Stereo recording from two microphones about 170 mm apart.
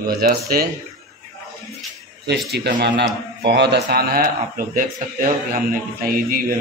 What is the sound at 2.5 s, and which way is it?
A man's voice, 75° right (ahead or behind).